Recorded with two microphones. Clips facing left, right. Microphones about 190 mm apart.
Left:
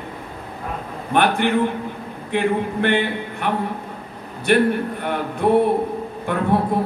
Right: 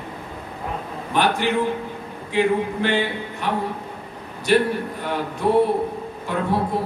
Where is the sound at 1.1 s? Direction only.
55° left (ahead or behind).